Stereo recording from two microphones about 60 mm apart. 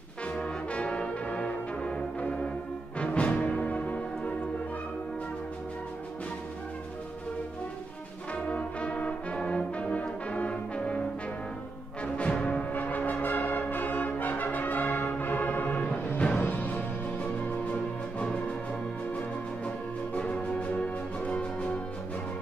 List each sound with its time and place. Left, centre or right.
0.4 s brass instrument: centre
3.0 s music: left
8.5 s brass instrument: left
12.0 s brass instrument: left
18.2 s music: centre
20.2 s music: centre